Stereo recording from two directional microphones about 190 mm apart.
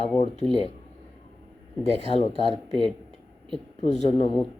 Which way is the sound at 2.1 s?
30° left (ahead or behind).